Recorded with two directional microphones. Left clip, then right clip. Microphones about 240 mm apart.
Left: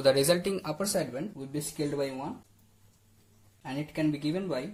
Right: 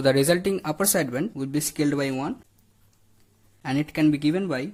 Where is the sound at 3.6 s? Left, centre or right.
Right.